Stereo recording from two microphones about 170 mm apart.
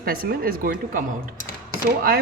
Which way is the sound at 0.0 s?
60° right (ahead or behind).